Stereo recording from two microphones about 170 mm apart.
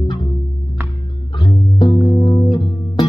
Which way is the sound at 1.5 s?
20° left (ahead or behind).